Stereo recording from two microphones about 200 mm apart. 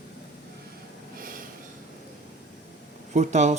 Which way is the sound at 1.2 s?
45° right (ahead or behind).